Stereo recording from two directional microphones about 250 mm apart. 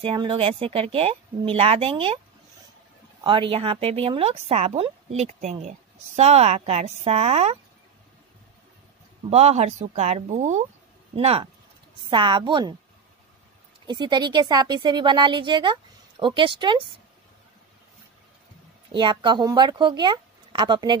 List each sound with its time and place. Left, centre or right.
0.0 s speech: right
3.3 s speech: right
9.3 s speech: right
13.8 s speech: centre
18.9 s speech: centre